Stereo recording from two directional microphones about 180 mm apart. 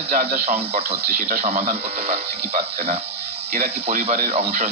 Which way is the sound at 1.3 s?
35° right (ahead or behind).